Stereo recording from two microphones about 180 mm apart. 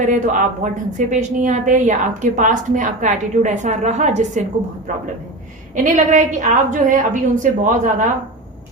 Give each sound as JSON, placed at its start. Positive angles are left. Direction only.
{"t": 0.0, "sound": "a woman's voice", "side_deg": -45}